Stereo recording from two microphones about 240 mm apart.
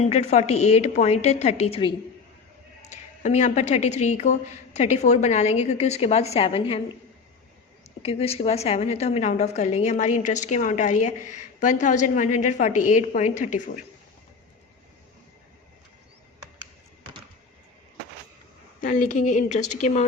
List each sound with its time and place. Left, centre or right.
0.0 s speech: left
8.0 s a woman's voice: left
18.8 s speech: left